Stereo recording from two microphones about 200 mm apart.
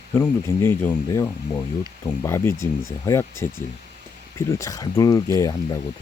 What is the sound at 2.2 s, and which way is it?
Speech, 15° left (ahead or behind).